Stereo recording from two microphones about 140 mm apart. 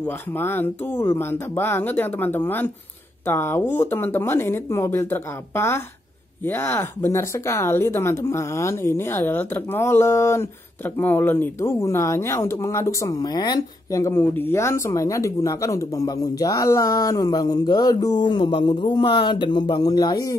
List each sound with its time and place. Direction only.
0.0 s speech: 15° left (ahead or behind)